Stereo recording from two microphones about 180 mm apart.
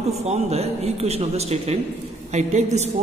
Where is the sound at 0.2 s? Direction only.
35° right (ahead or behind).